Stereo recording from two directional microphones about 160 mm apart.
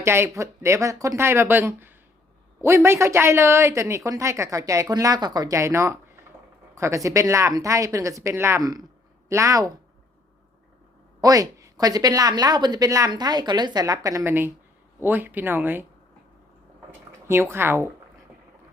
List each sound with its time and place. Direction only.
0.0 s speech: 15° right (ahead or behind)
11.2 s speech: 20° right (ahead or behind)
17.1 s speech: 15° right (ahead or behind)